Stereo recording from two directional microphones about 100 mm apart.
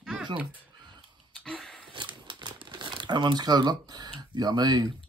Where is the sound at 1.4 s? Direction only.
5° left (ahead or behind).